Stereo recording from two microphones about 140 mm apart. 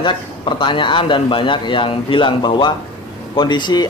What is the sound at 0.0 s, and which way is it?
A man's voice, 35° left (ahead or behind).